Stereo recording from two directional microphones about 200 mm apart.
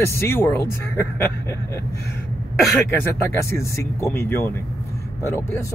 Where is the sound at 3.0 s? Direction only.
10° left (ahead or behind).